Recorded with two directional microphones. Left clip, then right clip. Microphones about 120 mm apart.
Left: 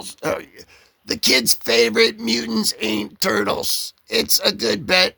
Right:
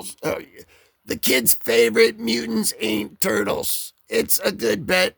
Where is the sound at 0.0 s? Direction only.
60° right (ahead or behind).